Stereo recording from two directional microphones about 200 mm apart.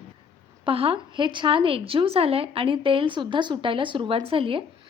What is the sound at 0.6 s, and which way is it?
Speech, 25° right (ahead or behind).